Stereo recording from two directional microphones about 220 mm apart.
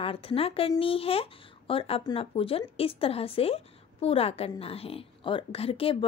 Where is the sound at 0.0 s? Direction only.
25° left (ahead or behind).